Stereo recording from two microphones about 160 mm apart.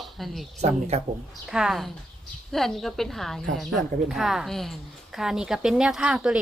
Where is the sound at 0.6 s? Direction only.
45° right (ahead or behind).